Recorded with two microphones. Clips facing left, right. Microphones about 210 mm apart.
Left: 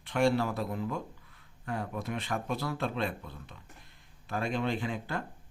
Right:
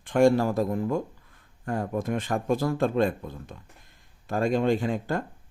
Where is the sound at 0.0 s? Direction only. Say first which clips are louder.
Right 7 dB; 45° right (ahead or behind).